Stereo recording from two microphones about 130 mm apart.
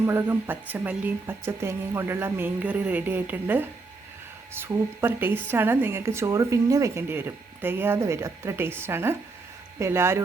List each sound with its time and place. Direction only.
0.0 s a woman's voice: 20° right (ahead or behind)